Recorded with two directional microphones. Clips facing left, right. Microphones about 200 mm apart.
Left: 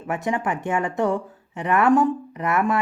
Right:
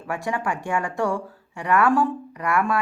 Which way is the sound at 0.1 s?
20° left (ahead or behind).